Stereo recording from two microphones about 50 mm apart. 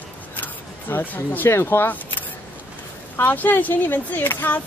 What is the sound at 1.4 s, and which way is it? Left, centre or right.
Speech, left.